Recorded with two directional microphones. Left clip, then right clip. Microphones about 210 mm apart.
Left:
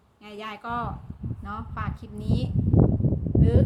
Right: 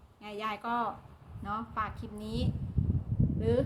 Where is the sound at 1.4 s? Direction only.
Centre (ahead or behind).